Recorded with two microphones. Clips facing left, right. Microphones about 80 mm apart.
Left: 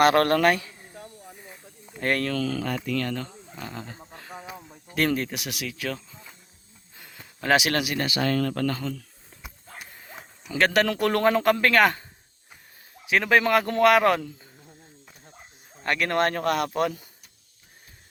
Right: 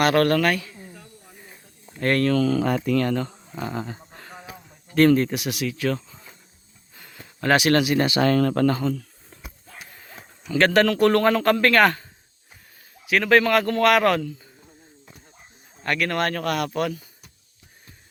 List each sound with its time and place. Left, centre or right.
0.0 s speech: left
2.0 s speech: centre
2.3 s speech: centre
2.6 s speech: right
3.2 s speech: centre
6.9 s a sound: centre
7.9 s speech: right
8.2 s speech: right
8.6 s speech: right
9.3 s a sound: centre
10.6 s speech: centre
13.1 s speech: centre
15.8 s speech: left